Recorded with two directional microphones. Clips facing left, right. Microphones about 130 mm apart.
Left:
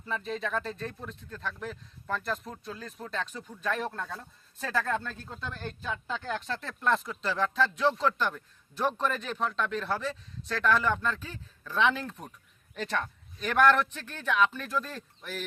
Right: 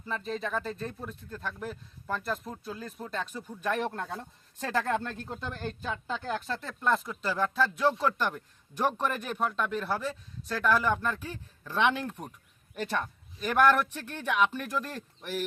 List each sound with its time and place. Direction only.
0.3 s speech: centre (ahead or behind)